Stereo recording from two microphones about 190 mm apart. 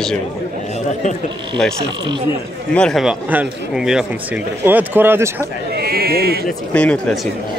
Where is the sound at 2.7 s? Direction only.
Centre (ahead or behind).